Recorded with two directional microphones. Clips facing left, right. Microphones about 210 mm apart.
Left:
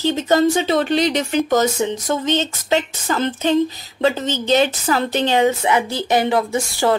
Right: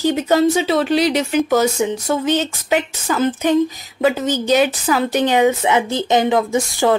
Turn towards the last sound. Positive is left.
turn(degrees=-15)  # may be behind; listen again after turning